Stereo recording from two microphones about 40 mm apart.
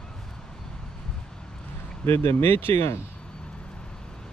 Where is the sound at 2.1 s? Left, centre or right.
Left.